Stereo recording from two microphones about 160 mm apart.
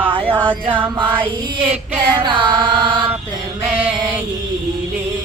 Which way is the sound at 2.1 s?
30° right (ahead or behind).